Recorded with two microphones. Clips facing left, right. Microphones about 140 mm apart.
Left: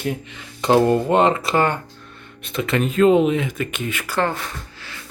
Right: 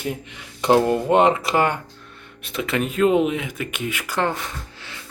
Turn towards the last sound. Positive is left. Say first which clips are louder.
# left 1 dB
turn(degrees=-20)  # may be behind; listen again after turning